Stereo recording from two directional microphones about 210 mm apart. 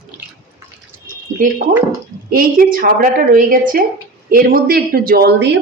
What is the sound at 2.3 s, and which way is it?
A woman's voice, 45° right (ahead or behind).